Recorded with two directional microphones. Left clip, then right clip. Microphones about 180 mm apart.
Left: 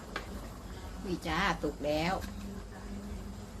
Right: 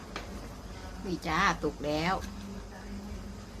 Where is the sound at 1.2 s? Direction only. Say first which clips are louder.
Right 4 dB; 20° right (ahead or behind).